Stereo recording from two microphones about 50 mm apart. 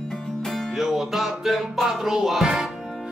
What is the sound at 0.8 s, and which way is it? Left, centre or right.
Music, centre.